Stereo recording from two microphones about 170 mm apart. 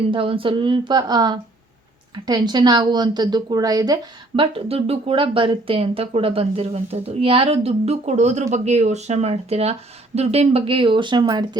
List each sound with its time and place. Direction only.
0.1 s a woman's voice: 30° right (ahead or behind)